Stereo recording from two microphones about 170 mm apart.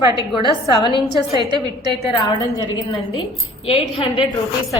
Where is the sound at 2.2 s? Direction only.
25° left (ahead or behind).